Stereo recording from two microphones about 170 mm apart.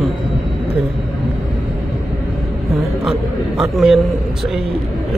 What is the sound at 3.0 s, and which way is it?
A man's voice, centre (ahead or behind).